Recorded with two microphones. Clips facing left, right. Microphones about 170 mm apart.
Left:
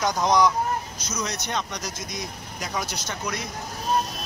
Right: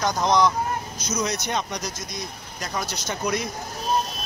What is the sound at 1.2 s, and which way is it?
Speech, 10° right (ahead or behind).